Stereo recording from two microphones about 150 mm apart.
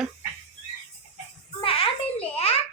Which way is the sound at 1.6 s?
40° left (ahead or behind).